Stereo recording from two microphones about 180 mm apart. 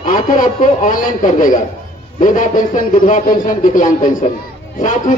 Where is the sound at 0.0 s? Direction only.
45° left (ahead or behind).